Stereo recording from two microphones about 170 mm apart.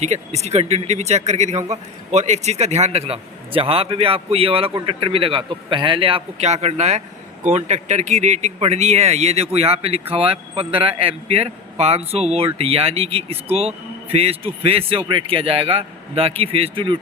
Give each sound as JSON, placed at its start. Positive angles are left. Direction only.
{"t": 0.0, "sound": "a man's voice", "side_deg": -40}